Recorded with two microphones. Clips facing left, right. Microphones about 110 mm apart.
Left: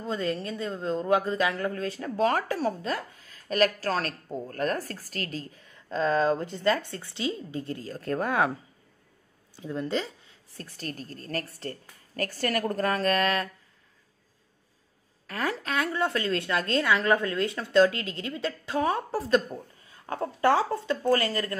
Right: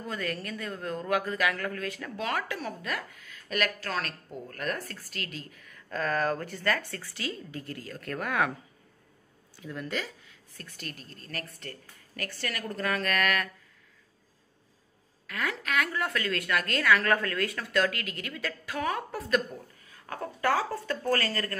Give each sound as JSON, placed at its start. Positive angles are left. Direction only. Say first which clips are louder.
{"t": 0.0, "sound": "speech", "louder": "left 5 dB", "side_deg": 25}
{"t": 9.6, "sound": "a woman's voice", "louder": "left 5 dB", "side_deg": 25}
{"t": 15.2, "sound": "speech", "louder": "left 3 dB", "side_deg": 35}